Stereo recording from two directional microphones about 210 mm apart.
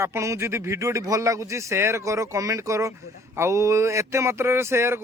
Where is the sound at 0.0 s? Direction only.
15° right (ahead or behind).